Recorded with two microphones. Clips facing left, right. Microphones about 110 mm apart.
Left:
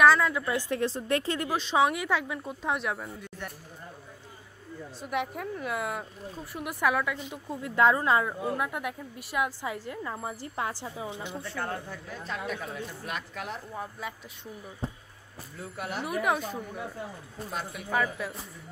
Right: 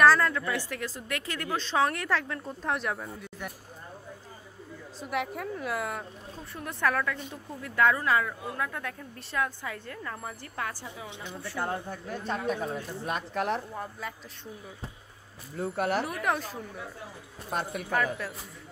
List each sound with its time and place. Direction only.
0.0 s a sound: centre (ahead or behind)
0.3 s speech: 20° left (ahead or behind)
1.6 s speech: 5° left (ahead or behind)
5.1 s a woman's voice: centre (ahead or behind)
7.6 s speech: 25° left (ahead or behind)
11.1 s speech: 35° left (ahead or behind)
11.5 s speech: 25° right (ahead or behind)
13.3 s speech: 55° right (ahead or behind)
13.7 s speech: 5° left (ahead or behind)
15.6 s speech: 60° right (ahead or behind)
16.0 s speech: 5° left (ahead or behind)
17.5 s speech: 55° right (ahead or behind)
17.9 s speech: centre (ahead or behind)